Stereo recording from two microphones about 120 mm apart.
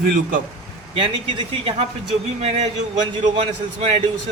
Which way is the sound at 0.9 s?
45° right (ahead or behind).